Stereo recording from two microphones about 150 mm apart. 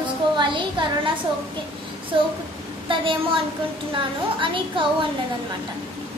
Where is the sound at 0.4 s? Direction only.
30° right (ahead or behind).